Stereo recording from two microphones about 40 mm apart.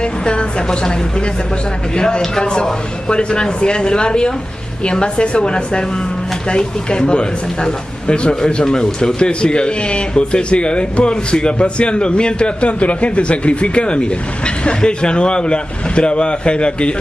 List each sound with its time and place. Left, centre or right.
0.0 s speech: left
2.0 s speech: left